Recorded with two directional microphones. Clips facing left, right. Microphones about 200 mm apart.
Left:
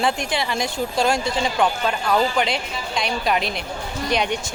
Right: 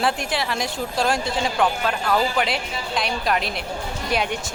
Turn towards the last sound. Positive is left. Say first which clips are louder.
# left 2 dB
turn(degrees=-5)  # may be behind; listen again after turning